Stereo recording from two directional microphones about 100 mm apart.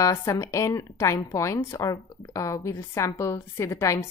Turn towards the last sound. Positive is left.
turn(degrees=30)  # may be behind; listen again after turning